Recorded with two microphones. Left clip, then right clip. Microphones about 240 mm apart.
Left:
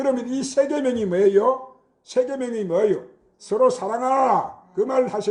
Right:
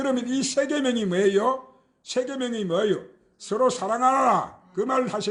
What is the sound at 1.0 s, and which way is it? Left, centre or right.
Speech, right.